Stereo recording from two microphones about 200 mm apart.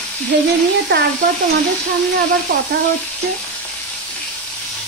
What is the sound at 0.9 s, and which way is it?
Speech, 65° right (ahead or behind).